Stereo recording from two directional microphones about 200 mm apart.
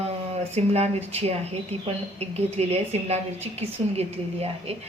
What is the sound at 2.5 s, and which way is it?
Speech, 30° right (ahead or behind).